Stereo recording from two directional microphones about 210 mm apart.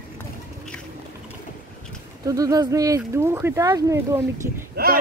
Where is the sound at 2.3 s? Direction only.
15° right (ahead or behind).